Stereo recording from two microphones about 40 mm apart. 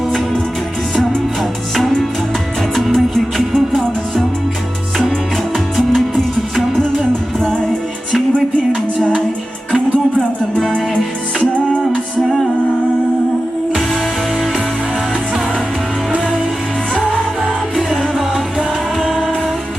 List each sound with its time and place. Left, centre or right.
0.9 s music: centre
5.7 s music: centre
18.9 s music: centre